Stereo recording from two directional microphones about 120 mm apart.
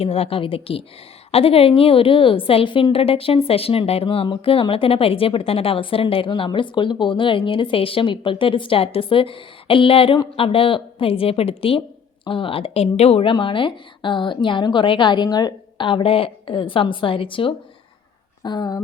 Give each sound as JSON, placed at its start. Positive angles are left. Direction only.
{"t": 0.0, "sound": "a woman's voice", "side_deg": 55}
{"t": 13.3, "sound": "a woman's voice", "side_deg": 45}
{"t": 18.4, "sound": "speech", "side_deg": 35}